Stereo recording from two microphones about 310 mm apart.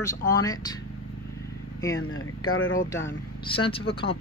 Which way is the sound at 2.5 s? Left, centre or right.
Left.